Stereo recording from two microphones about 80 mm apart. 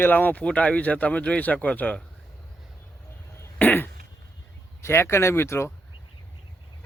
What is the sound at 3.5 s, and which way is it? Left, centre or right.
Throat clearing, left.